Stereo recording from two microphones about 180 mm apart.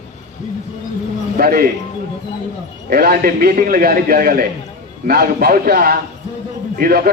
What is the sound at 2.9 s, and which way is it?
A man's voice, 60° right (ahead or behind).